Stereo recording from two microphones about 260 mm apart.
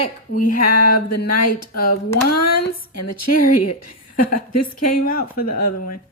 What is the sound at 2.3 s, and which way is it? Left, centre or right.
Speech, left.